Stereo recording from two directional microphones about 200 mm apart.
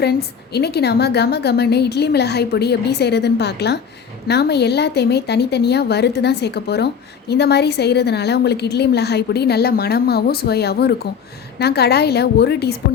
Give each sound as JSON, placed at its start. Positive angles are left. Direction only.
{"t": 0.0, "sound": "a woman's voice", "side_deg": 55}